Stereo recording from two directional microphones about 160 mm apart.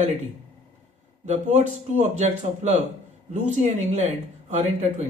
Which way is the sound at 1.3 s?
45° right (ahead or behind).